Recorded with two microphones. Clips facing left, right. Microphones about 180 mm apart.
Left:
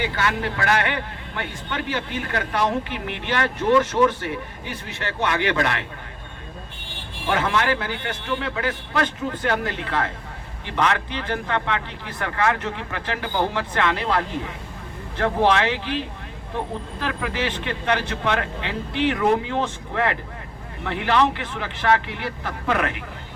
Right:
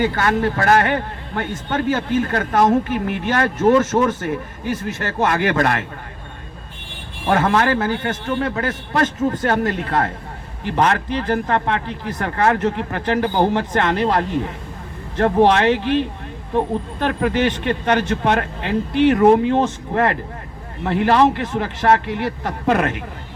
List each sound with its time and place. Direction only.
0.0 s a man's voice: 45° right (ahead or behind)
7.3 s a man's voice: 45° right (ahead or behind)
17.0 s speech: 40° right (ahead or behind)